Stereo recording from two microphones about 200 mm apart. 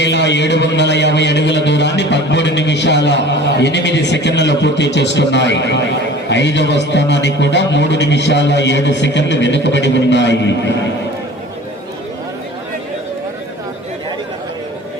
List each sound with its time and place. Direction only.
0.0 s a man's voice: 60° left (ahead or behind)